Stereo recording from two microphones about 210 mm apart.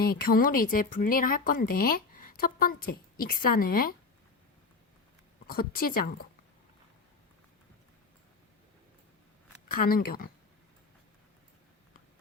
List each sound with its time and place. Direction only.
0.0 s speech: 45° left (ahead or behind)
5.5 s speech: 45° left (ahead or behind)
9.6 s speech: 45° left (ahead or behind)